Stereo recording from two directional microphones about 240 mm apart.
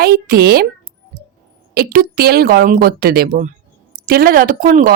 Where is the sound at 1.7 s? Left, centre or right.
Right.